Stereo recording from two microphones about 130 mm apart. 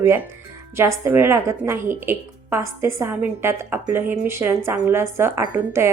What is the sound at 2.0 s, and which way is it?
A woman's voice, 20° right (ahead or behind).